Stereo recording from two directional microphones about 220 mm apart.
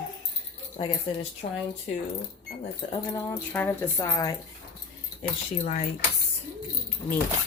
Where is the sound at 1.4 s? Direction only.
35° left (ahead or behind).